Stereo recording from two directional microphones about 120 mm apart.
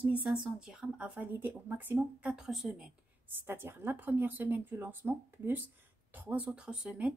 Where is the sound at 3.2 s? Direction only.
20° right (ahead or behind).